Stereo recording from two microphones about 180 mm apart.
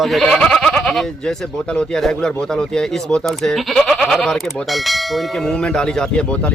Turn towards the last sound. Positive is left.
turn(degrees=5)  # may be behind; listen again after turning